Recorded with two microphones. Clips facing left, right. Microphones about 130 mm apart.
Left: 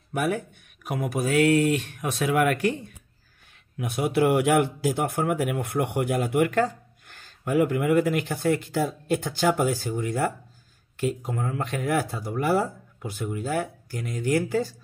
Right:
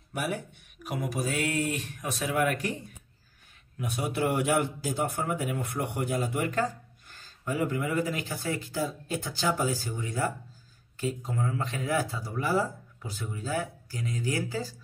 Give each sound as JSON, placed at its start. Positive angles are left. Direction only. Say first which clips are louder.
{"t": 0.1, "sound": "speech", "louder": "left 6 dB", "side_deg": 50}
{"t": 3.7, "sound": "a man's voice", "louder": "left 7 dB", "side_deg": 70}
{"t": 11.2, "sound": "speech", "louder": "left 2 dB", "side_deg": 45}
{"t": 11.6, "sound": "speech", "louder": "left 6 dB", "side_deg": 60}